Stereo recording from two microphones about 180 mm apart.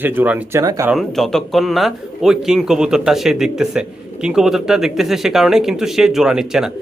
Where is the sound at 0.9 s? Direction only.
Centre (ahead or behind).